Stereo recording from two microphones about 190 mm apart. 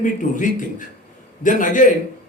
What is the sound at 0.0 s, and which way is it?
A man's voice, 45° left (ahead or behind).